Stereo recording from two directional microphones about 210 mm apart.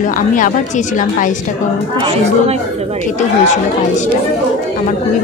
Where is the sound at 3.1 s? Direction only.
35° left (ahead or behind).